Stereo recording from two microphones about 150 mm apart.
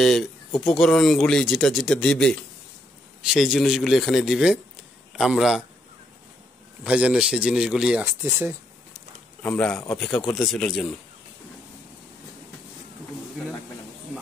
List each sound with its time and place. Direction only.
0.0 s speech: centre (ahead or behind)
6.8 s a man's voice: 5° right (ahead or behind)
8.0 s a man's voice: 15° right (ahead or behind)
9.4 s speech: 10° left (ahead or behind)